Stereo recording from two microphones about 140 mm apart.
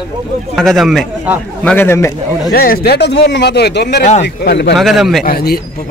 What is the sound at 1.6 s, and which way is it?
Speech, 15° left (ahead or behind).